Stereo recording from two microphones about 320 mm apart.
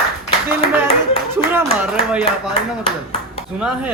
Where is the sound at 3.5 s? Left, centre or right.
Centre.